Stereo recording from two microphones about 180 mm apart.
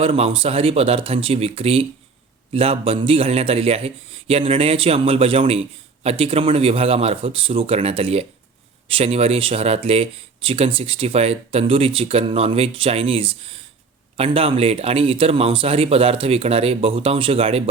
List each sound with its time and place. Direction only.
0.0 s a man's voice: 30° right (ahead or behind)